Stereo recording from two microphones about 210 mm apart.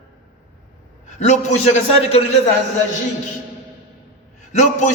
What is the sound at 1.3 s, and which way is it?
Speech, 35° left (ahead or behind).